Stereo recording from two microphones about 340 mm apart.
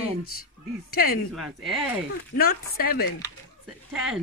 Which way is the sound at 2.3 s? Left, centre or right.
Left.